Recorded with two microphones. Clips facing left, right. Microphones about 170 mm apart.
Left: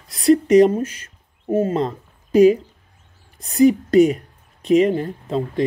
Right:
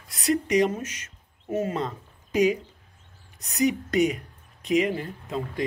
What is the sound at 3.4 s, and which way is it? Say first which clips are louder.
Speech: left 10 dB; 30° left (ahead or behind).